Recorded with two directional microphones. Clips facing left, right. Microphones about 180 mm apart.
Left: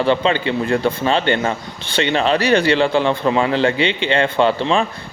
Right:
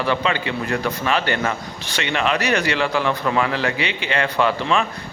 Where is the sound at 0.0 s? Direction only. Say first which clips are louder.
Left 5 dB; 30° left (ahead or behind).